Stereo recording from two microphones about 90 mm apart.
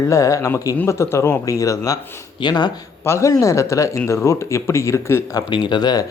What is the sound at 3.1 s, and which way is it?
Speech, 35° left (ahead or behind).